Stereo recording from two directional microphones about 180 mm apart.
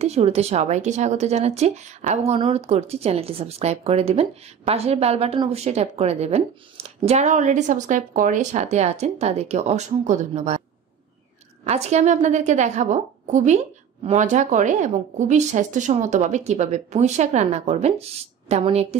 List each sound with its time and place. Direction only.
0.0 s speech: 35° right (ahead or behind)
11.6 s speech: 40° right (ahead or behind)